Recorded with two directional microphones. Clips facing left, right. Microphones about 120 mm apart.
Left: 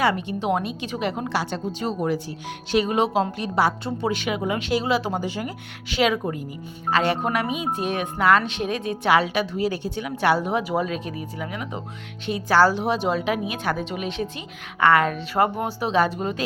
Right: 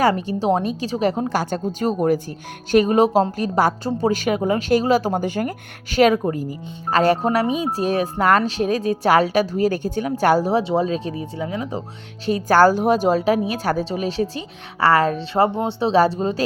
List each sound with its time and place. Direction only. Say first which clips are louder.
0.0 s a woman's voice: right 4 dB; 40° right (ahead or behind)
12.2 s speech: right 4 dB; 45° right (ahead or behind)